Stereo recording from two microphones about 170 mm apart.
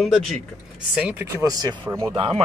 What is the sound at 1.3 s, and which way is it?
Speech, 20° right (ahead or behind).